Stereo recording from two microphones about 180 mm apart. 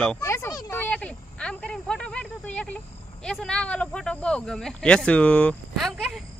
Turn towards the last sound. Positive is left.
turn(degrees=0)  # may be behind; listen again after turning